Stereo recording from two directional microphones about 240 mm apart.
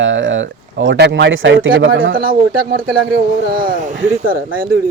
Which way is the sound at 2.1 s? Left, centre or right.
Right.